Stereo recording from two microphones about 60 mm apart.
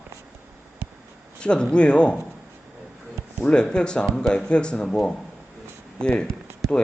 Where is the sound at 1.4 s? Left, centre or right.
Centre.